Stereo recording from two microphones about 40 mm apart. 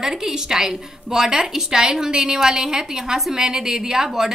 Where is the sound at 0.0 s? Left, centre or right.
Centre.